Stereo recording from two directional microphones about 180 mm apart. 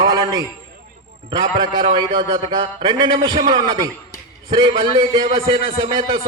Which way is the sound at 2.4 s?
25° right (ahead or behind).